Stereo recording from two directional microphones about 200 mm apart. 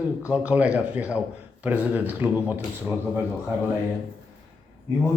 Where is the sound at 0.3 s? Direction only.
5° right (ahead or behind).